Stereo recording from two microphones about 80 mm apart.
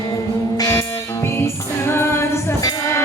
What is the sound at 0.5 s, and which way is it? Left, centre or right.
Music, left.